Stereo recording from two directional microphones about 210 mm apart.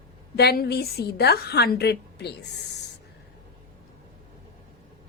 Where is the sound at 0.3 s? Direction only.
50° left (ahead or behind).